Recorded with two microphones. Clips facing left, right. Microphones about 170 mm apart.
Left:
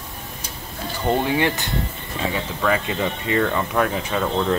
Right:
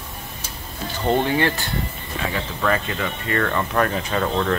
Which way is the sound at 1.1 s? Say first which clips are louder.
Right 1 dB; 5° left (ahead or behind).